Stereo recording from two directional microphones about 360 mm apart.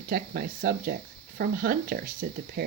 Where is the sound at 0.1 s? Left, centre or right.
Right.